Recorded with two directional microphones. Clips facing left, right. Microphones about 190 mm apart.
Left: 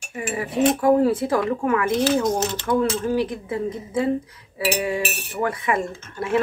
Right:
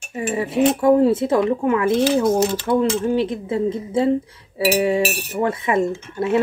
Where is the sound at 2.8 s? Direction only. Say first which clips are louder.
Right 3 dB; 25° right (ahead or behind).